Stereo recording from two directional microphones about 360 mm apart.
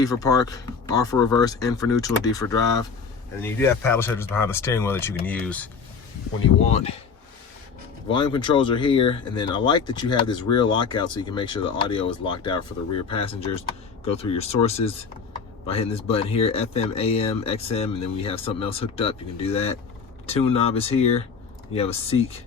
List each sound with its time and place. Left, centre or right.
0.0 s speech: centre
6.7 s speech: centre
8.0 s speech: centre